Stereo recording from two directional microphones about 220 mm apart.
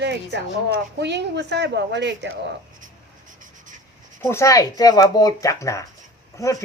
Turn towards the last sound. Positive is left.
turn(degrees=15)  # may be behind; listen again after turning